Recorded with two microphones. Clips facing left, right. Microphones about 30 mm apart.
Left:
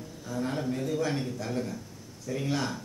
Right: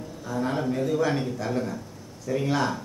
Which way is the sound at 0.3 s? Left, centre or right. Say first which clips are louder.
Right 4 dB; centre.